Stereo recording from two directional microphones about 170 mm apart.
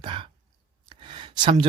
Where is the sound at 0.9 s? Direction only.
30° right (ahead or behind).